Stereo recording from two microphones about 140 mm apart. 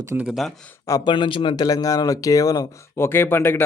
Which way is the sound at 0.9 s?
35° left (ahead or behind).